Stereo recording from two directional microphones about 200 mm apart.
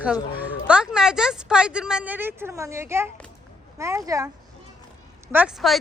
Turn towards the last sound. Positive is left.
turn(degrees=0)  # may be behind; listen again after turning